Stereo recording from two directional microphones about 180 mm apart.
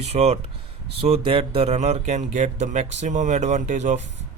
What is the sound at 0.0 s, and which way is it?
Speech, 35° right (ahead or behind).